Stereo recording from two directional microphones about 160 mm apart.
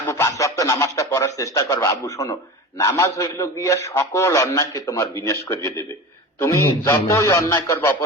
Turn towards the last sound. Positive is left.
turn(degrees=15)  # may be behind; listen again after turning